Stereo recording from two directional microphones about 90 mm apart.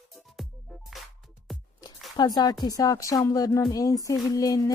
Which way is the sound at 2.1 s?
50° left (ahead or behind).